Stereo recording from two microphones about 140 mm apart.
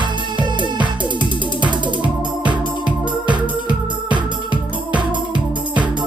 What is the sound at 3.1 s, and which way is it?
Music, 35° right (ahead or behind).